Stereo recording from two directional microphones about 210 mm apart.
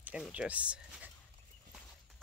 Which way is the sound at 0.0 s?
5° right (ahead or behind).